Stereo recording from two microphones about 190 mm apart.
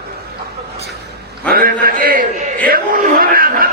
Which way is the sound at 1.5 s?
50° right (ahead or behind).